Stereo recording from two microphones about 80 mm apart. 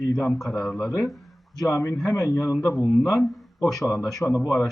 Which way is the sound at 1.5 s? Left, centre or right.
Left.